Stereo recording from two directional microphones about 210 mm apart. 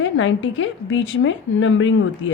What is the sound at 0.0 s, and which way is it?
A woman's voice, 65° left (ahead or behind).